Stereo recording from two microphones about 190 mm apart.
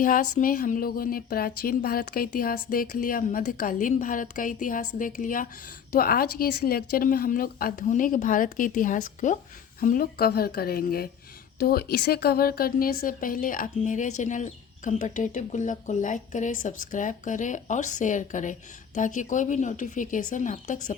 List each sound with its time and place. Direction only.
0.0 s speech: 45° left (ahead or behind)